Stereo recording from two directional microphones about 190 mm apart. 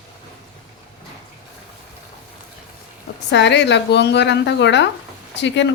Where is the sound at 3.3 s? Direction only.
65° left (ahead or behind).